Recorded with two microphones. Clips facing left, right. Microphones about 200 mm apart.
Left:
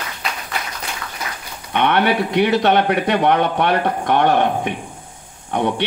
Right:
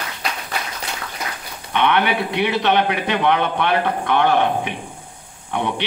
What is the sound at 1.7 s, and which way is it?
A man's voice, 45° left (ahead or behind).